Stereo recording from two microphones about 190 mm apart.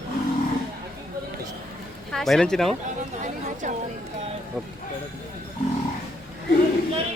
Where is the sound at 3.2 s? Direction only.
40° right (ahead or behind).